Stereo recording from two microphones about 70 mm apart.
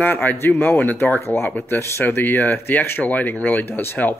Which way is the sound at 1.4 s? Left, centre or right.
Left.